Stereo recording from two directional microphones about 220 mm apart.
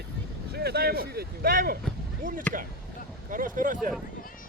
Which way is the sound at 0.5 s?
45° right (ahead or behind).